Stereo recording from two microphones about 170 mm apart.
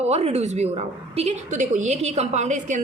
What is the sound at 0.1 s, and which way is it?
A woman's voice, 40° right (ahead or behind).